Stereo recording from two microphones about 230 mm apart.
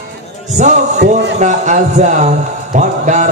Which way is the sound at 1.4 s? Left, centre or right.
Right.